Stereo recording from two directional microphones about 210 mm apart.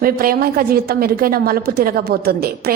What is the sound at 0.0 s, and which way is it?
A woman's voice, 45° right (ahead or behind).